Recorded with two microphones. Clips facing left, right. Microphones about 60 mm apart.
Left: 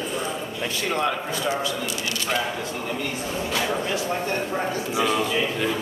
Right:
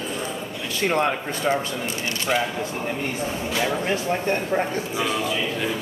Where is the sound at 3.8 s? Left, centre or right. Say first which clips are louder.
Right 2 dB; right.